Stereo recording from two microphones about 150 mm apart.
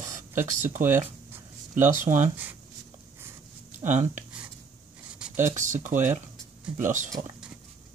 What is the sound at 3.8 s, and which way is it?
Speech, 55° right (ahead or behind).